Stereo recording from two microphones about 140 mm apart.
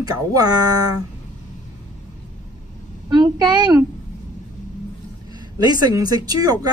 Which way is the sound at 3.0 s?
30° right (ahead or behind).